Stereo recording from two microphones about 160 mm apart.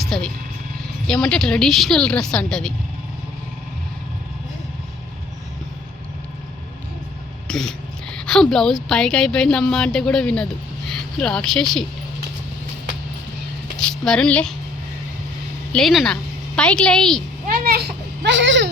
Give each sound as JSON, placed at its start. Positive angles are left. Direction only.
{"t": 0.0, "sound": "music", "side_deg": 0}
{"t": 1.0, "sound": "a woman's voice", "side_deg": 5}
{"t": 7.4, "sound": "a sound", "side_deg": 5}
{"t": 8.3, "sound": "a woman's voice", "side_deg": 5}
{"t": 13.7, "sound": "speech", "side_deg": 5}
{"t": 15.7, "sound": "a woman's voice", "side_deg": 0}
{"t": 17.5, "sound": "a child's voice", "side_deg": -75}